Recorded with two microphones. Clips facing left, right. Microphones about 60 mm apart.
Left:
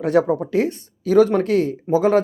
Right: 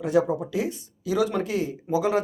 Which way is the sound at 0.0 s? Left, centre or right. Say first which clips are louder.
Left 5 dB; left.